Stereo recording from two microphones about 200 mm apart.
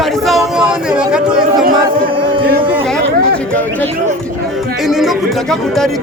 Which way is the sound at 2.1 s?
25° right (ahead or behind).